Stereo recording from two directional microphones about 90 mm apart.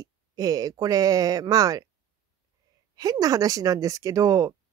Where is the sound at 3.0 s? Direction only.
45° right (ahead or behind).